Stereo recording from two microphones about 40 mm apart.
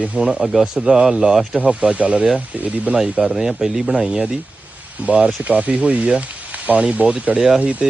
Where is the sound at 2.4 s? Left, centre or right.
Right.